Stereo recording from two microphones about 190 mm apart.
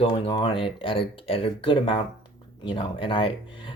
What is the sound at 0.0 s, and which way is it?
Speech, 25° left (ahead or behind).